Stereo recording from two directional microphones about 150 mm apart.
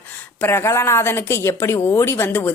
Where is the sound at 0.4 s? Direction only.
15° left (ahead or behind).